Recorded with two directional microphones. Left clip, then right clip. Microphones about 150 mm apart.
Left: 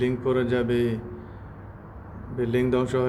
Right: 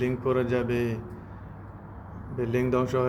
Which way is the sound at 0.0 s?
15° left (ahead or behind).